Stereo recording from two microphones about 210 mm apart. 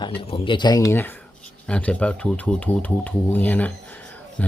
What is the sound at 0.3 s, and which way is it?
Speech, 25° left (ahead or behind).